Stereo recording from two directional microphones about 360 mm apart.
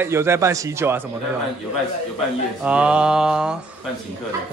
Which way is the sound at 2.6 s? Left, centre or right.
Centre.